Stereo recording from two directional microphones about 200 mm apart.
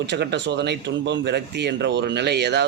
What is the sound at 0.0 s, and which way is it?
Speech, 60° right (ahead or behind).